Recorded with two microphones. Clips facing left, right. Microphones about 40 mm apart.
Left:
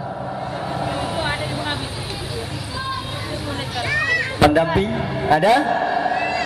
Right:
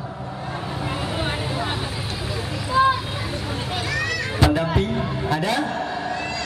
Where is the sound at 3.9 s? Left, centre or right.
Centre.